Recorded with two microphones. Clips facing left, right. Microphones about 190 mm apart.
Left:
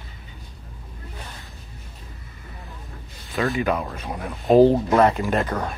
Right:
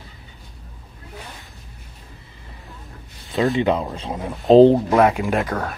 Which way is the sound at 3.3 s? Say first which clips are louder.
Right 4 dB; 20° right (ahead or behind).